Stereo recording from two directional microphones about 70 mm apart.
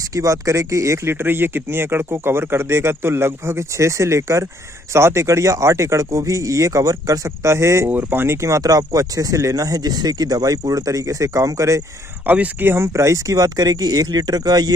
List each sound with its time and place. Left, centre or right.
0.0 s speech: right
7.9 s speech: right
12.3 s speech: right
12.6 s speech: right